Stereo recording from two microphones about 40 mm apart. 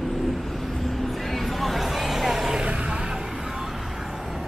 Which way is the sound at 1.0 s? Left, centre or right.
Centre.